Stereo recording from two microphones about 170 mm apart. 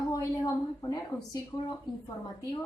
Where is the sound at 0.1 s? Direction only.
20° left (ahead or behind).